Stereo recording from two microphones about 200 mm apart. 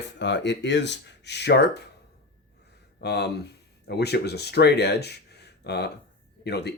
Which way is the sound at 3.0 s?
55° left (ahead or behind).